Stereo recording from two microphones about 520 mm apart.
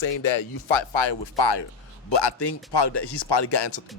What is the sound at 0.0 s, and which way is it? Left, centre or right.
Speech, left.